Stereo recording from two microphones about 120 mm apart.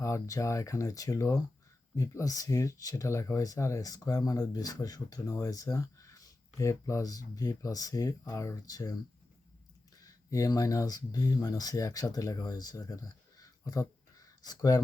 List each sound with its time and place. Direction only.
0.0 s speech: 25° left (ahead or behind)
10.0 s speech: 30° left (ahead or behind)